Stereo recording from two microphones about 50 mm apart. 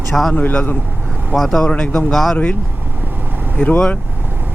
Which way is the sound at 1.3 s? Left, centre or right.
Centre.